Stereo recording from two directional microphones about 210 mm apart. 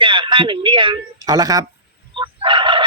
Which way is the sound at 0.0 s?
25° right (ahead or behind).